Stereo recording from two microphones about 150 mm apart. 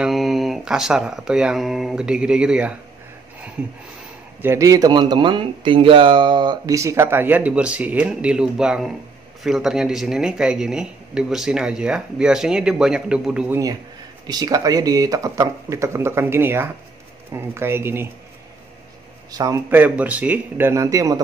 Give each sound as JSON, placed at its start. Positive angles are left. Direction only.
{"t": 0.0, "sound": "speech", "side_deg": 0}
{"t": 4.4, "sound": "a man's voice", "side_deg": -20}
{"t": 14.2, "sound": "a man's voice", "side_deg": -25}
{"t": 19.3, "sound": "a man's voice", "side_deg": -25}
{"t": 19.7, "sound": "a man's voice", "side_deg": -10}